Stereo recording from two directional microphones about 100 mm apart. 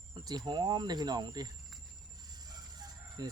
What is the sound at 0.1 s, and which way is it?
Speech, 45° right (ahead or behind).